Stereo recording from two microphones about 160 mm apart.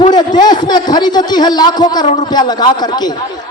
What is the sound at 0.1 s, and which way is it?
A man's voice, 25° left (ahead or behind).